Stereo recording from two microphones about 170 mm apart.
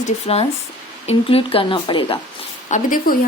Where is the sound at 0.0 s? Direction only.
35° left (ahead or behind).